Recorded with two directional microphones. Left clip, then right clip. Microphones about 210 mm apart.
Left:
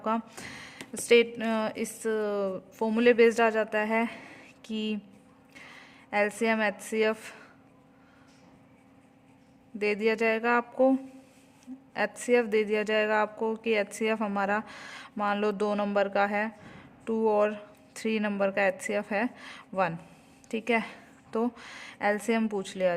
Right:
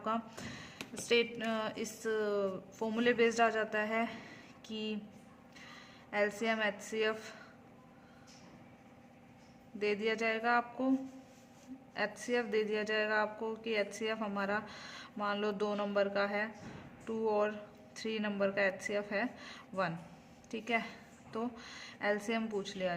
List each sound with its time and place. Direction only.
0.0 s speech: 40° left (ahead or behind)
9.7 s speech: 40° left (ahead or behind)
11.9 s a woman's voice: 45° left (ahead or behind)